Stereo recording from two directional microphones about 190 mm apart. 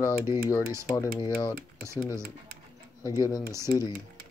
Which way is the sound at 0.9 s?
20° left (ahead or behind).